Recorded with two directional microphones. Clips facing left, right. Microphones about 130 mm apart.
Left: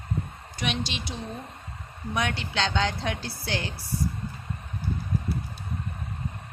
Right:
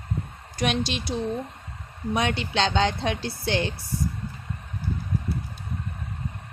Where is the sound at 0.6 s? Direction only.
45° right (ahead or behind).